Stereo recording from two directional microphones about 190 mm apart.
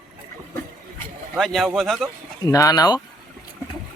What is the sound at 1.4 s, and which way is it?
Speech, centre (ahead or behind).